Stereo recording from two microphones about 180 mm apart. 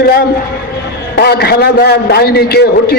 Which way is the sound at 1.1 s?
65° left (ahead or behind).